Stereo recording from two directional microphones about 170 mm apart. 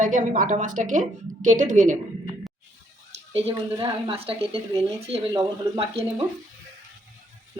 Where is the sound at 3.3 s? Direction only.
30° right (ahead or behind).